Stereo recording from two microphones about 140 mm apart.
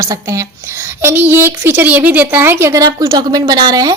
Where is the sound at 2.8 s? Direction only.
30° right (ahead or behind).